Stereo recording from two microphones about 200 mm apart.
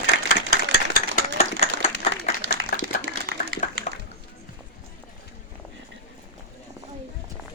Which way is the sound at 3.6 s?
40° left (ahead or behind).